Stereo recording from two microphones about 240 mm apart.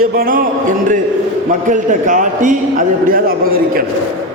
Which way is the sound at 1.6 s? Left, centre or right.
Right.